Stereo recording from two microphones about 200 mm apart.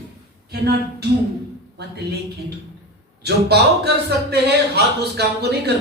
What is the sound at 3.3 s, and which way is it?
A man's voice, 55° right (ahead or behind).